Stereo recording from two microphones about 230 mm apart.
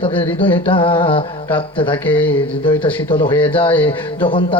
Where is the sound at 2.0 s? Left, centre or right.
Centre.